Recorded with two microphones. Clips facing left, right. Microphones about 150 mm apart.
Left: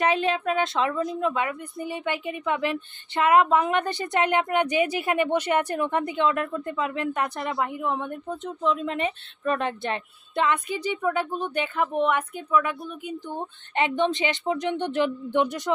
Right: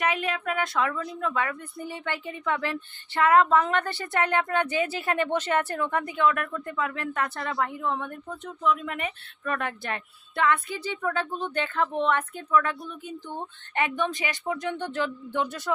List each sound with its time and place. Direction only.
0.0 s a woman's voice: 30° left (ahead or behind)